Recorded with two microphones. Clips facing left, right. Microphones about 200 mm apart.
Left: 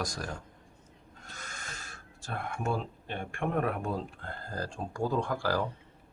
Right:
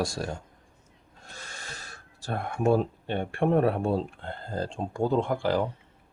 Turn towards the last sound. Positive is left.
turn(degrees=-20)  # may be behind; listen again after turning